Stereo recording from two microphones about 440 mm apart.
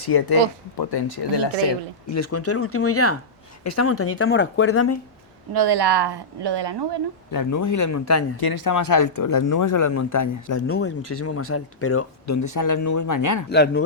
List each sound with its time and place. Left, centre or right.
0.0 s speech: left
2.0 s speech: left
5.5 s a woman's voice: right
7.3 s speech: left
8.4 s speech: left
10.7 s speech: left
13.5 s speech: left